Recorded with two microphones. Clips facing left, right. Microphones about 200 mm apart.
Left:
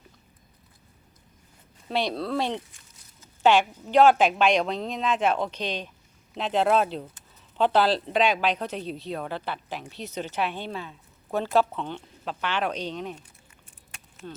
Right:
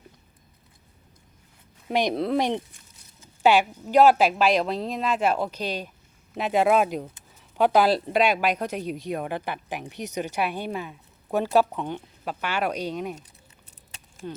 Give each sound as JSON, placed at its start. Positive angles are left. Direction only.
{"t": 1.9, "sound": "speech", "side_deg": -15}